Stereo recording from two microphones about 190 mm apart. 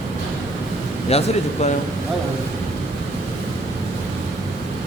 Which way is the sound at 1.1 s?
35° left (ahead or behind).